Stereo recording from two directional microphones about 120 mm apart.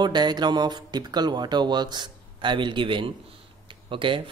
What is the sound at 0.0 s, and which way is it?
Speech, 35° right (ahead or behind).